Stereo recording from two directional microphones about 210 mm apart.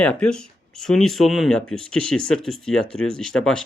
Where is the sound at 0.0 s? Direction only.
5° left (ahead or behind).